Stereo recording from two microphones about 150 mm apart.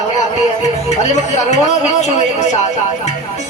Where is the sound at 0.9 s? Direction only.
50° left (ahead or behind).